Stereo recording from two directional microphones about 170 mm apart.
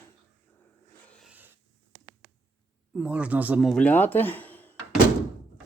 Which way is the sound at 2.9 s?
5° right (ahead or behind).